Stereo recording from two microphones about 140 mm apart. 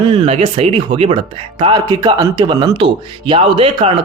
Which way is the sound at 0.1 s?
45° right (ahead or behind).